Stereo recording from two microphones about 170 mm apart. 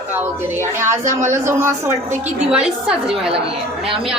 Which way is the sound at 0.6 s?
15° right (ahead or behind).